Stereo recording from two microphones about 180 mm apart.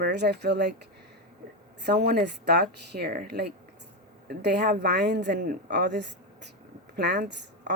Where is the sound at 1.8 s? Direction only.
65° right (ahead or behind).